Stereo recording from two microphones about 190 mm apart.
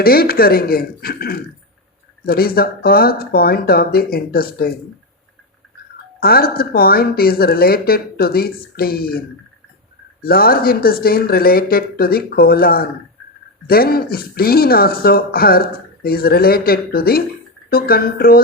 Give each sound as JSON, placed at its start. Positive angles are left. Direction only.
{"t": 0.0, "sound": "speech", "side_deg": 55}
{"t": 6.1, "sound": "speech", "side_deg": 50}
{"t": 10.2, "sound": "speech", "side_deg": 50}